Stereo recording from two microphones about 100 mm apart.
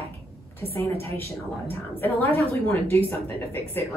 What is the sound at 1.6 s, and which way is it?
A woman's voice, 25° left (ahead or behind).